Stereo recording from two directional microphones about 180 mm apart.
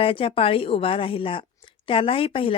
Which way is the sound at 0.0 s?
30° left (ahead or behind).